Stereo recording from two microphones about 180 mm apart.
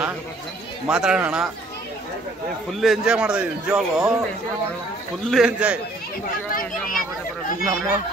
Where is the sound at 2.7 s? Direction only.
Centre (ahead or behind).